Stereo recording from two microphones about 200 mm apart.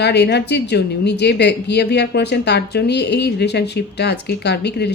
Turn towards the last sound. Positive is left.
turn(degrees=55)  # may be behind; listen again after turning